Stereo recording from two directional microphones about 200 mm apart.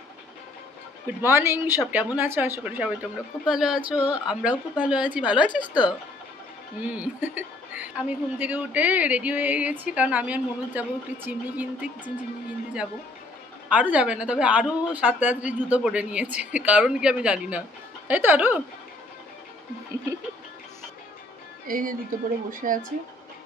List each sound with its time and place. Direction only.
1.2 s a woman's voice: 15° right (ahead or behind)
5.5 s speech: 20° left (ahead or behind)
7.0 s a woman's voice: 10° right (ahead or behind)
13.7 s a woman's voice: 5° right (ahead or behind)
21.6 s speech: 45° right (ahead or behind)